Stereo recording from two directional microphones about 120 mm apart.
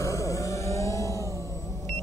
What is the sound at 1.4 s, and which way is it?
Vehicle, 25° left (ahead or behind).